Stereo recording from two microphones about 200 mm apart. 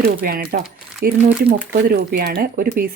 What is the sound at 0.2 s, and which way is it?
Speech, 50° right (ahead or behind).